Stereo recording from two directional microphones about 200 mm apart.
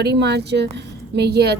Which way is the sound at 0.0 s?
55° right (ahead or behind).